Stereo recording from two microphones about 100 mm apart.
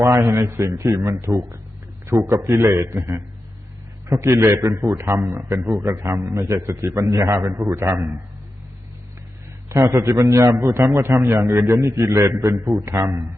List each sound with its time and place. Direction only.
0.0 s a man's voice: 30° right (ahead or behind)
9.6 s a man's voice: 35° right (ahead or behind)